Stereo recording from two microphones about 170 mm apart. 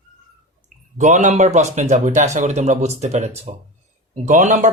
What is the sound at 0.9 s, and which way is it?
Speech, 45° right (ahead or behind).